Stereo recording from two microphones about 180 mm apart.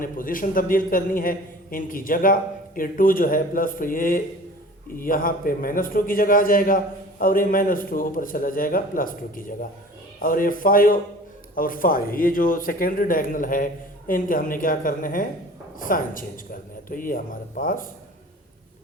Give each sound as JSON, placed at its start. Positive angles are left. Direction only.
{"t": 0.0, "sound": "a man's voice", "side_deg": 50}